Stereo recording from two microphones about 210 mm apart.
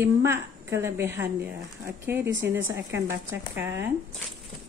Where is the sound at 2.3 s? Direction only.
60° right (ahead or behind).